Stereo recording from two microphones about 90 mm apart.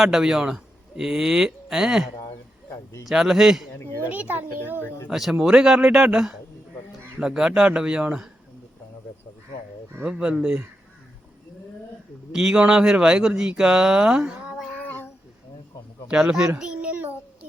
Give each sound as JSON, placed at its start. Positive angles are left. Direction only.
{"t": 0.0, "sound": "speech", "side_deg": -5}
{"t": 3.1, "sound": "a man's voice", "side_deg": -5}
{"t": 4.1, "sound": "a child's voice", "side_deg": -20}
{"t": 5.0, "sound": "speech", "side_deg": -5}
{"t": 10.0, "sound": "speech", "side_deg": -10}
{"t": 12.3, "sound": "speech", "side_deg": -5}
{"t": 14.8, "sound": "a sound", "side_deg": 20}
{"t": 16.0, "sound": "speech", "side_deg": -10}
{"t": 16.6, "sound": "child singing", "side_deg": -10}